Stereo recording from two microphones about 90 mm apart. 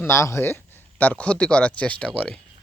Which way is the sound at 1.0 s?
15° left (ahead or behind).